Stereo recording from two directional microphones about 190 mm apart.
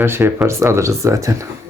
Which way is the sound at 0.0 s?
10° right (ahead or behind).